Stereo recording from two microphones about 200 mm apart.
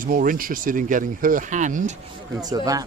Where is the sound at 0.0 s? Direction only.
45° right (ahead or behind).